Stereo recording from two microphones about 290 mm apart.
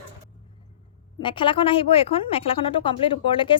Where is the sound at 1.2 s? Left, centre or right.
Centre.